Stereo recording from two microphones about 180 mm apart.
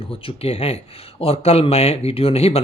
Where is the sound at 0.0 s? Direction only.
30° left (ahead or behind).